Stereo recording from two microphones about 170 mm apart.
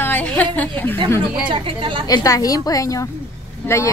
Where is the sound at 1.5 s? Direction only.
30° right (ahead or behind).